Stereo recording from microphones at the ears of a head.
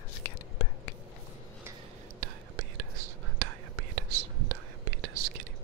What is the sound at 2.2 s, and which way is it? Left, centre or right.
Whispering, right.